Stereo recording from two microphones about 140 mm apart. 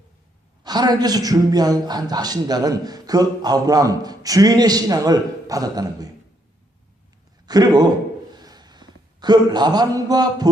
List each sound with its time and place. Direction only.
0.6 s a man's voice: 30° right (ahead or behind)
7.4 s a man's voice: 30° right (ahead or behind)
8.3 s a sound: 30° right (ahead or behind)